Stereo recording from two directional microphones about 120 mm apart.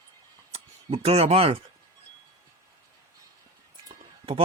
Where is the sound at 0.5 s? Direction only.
55° right (ahead or behind).